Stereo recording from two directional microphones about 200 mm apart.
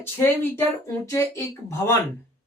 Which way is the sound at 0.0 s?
10° left (ahead or behind).